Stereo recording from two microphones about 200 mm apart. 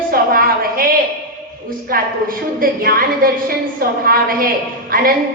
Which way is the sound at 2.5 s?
45° right (ahead or behind).